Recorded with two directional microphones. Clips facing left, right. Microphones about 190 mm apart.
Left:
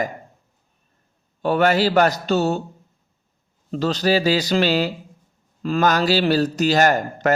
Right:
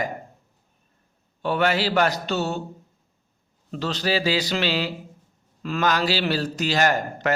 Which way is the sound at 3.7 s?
40° left (ahead or behind).